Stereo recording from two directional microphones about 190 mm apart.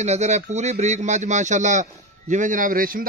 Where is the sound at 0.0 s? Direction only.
35° right (ahead or behind).